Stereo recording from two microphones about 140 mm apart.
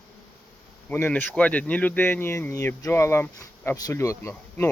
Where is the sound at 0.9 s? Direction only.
15° left (ahead or behind).